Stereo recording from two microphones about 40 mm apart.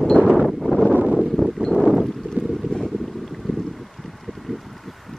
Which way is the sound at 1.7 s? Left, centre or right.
Centre.